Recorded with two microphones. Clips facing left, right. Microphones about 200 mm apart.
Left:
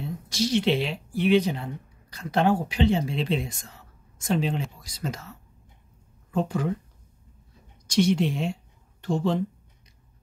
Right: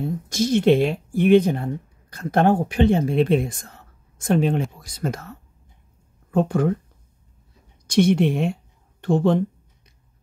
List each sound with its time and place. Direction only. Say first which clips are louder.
0.0 s speech: right 5 dB; 50° right (ahead or behind)
7.8 s speech: right 5 dB; 55° right (ahead or behind)